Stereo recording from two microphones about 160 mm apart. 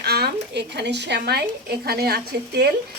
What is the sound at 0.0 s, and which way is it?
Speech, 90° right.